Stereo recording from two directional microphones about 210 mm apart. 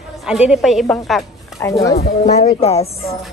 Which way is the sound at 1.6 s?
15° left (ahead or behind).